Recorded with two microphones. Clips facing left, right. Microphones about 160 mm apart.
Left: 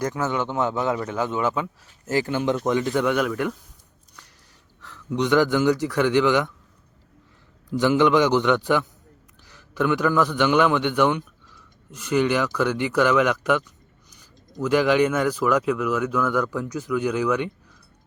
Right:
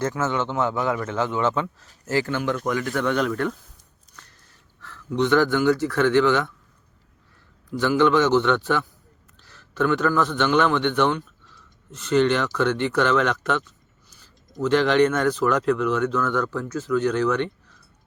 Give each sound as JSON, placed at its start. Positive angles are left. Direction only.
{"t": 0.0, "sound": "speech", "side_deg": 15}
{"t": 4.8, "sound": "speech", "side_deg": 15}
{"t": 7.7, "sound": "a man's voice", "side_deg": 15}